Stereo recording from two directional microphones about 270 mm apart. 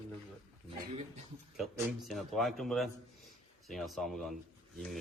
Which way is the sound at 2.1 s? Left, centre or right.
Centre.